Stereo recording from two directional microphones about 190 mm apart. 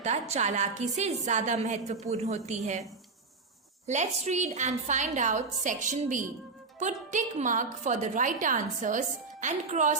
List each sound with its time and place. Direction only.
0.0 s a woman's voice: 35° right (ahead or behind)
3.8 s a woman's voice: 35° right (ahead or behind)